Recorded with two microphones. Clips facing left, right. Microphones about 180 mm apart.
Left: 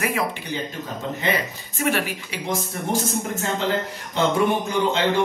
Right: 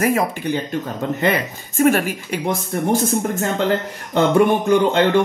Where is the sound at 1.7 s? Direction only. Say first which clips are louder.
Right 8 dB; 45° right (ahead or behind).